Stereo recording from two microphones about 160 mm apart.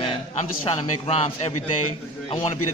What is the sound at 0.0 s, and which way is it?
A man's voice, 40° left (ahead or behind).